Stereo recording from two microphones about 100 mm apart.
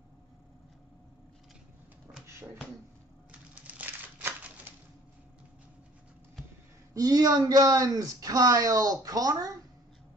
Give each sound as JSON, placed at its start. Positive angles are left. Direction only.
{"t": 3.3, "sound": "crumpling", "side_deg": -15}
{"t": 6.9, "sound": "speech", "side_deg": -40}